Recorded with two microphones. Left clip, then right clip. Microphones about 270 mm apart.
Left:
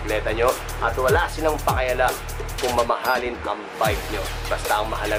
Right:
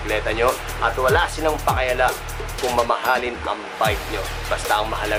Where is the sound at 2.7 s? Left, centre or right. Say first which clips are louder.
Right 1 dB; left.